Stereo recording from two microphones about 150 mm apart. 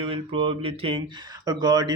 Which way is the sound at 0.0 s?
35° right (ahead or behind).